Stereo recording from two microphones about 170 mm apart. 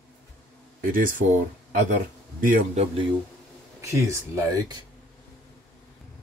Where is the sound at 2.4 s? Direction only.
55° right (ahead or behind).